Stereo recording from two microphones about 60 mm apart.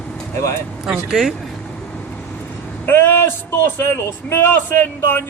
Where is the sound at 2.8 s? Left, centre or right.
Left.